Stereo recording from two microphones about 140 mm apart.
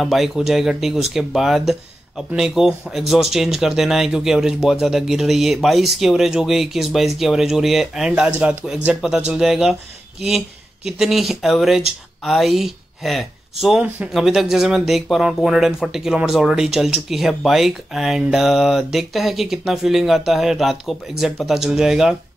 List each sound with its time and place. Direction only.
0.0 s speech: centre (ahead or behind)
10.9 s speech: 5° right (ahead or behind)